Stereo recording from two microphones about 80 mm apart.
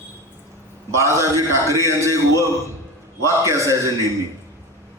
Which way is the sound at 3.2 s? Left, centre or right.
Right.